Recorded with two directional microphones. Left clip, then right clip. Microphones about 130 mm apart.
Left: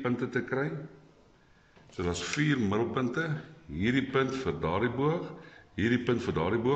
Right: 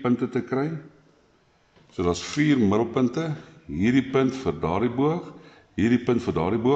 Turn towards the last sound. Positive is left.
turn(degrees=-40)  # may be behind; listen again after turning